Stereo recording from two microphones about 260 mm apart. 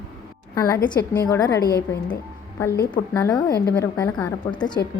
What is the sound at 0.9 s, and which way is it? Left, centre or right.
Speech, centre.